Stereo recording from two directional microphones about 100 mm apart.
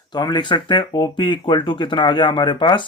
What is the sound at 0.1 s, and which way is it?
A man's voice, 45° left (ahead or behind).